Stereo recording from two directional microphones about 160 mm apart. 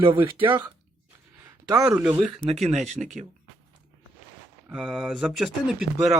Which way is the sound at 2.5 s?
40° right (ahead or behind).